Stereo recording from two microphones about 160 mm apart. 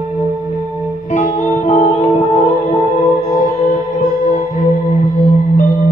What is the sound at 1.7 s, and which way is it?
Music, 50° left (ahead or behind).